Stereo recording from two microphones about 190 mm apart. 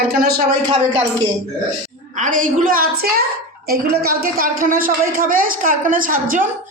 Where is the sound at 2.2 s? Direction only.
45° right (ahead or behind).